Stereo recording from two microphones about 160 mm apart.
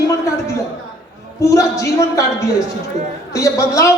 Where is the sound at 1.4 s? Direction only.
20° left (ahead or behind).